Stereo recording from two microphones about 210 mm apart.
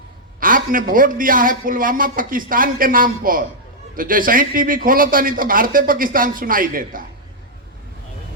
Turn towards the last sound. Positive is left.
turn(degrees=-40)  # may be behind; listen again after turning